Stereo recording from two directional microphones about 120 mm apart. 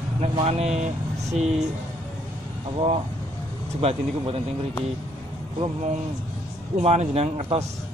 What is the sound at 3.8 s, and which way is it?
Speech, 60° right (ahead or behind).